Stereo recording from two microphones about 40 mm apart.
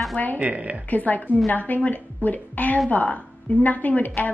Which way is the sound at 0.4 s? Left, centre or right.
Right.